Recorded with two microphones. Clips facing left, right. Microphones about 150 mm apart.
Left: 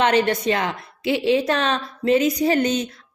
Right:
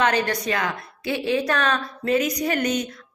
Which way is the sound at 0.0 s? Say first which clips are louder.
Left 4 dB; 25° left (ahead or behind).